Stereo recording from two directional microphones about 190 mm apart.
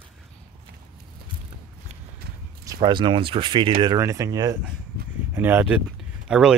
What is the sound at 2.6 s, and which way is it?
Speech, 25° right (ahead or behind).